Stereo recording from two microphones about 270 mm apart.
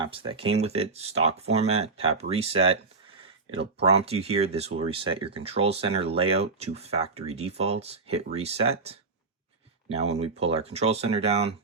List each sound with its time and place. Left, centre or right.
0.0 s speech: centre
3.8 s speech: right